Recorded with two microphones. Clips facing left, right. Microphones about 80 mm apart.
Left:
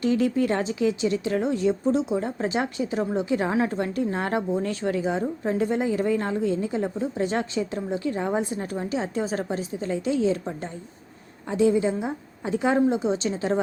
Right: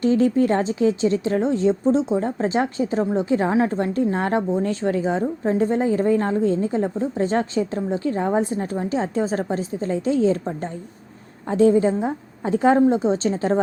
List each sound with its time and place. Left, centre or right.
0.0 s a woman's voice: right
11.4 s a woman's voice: right